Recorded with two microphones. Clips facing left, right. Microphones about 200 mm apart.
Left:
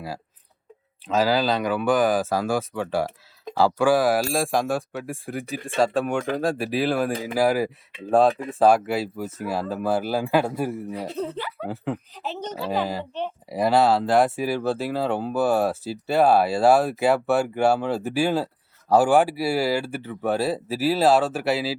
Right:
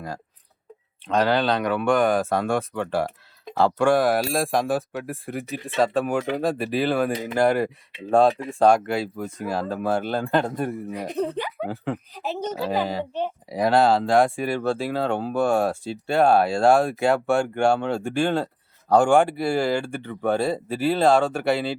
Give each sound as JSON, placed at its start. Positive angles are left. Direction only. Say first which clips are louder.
{"t": 1.0, "sound": "speech", "louder": "even", "side_deg": 0}
{"t": 10.9, "sound": "speech", "louder": "right 3 dB", "side_deg": -15}